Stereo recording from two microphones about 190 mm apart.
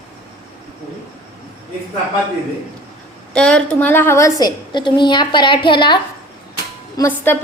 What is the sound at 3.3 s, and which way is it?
A woman's voice, 5° left (ahead or behind).